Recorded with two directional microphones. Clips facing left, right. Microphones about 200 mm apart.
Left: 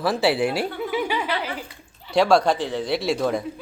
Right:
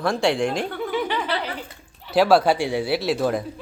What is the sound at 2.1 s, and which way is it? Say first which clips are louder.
Speech: right 1 dB; 5° right (ahead or behind).